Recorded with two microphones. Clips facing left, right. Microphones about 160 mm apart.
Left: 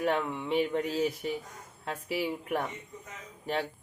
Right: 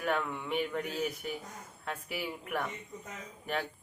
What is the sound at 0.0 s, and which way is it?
Speech, 30° left (ahead or behind).